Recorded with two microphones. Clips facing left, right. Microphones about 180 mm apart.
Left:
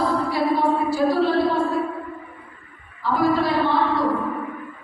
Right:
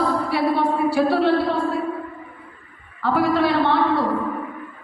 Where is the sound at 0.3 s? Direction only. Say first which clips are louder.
Even; 65° right (ahead or behind).